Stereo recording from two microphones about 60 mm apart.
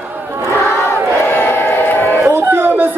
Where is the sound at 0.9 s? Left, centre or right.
Left.